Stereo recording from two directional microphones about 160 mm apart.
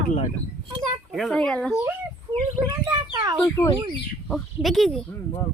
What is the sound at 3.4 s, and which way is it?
Speech, 20° left (ahead or behind).